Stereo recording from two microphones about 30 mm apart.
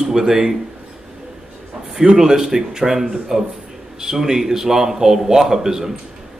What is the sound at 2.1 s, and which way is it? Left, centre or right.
A man's voice, centre.